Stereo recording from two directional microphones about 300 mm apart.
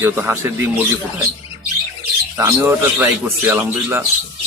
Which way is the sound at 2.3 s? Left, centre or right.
Centre.